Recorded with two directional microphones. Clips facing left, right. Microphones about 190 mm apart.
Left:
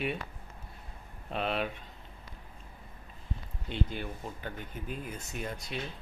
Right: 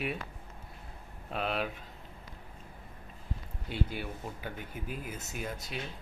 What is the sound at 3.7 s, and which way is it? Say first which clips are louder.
Speech: left 1 dB; 10° right (ahead or behind).